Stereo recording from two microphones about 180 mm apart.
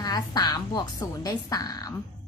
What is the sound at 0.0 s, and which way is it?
A woman's voice, 20° left (ahead or behind).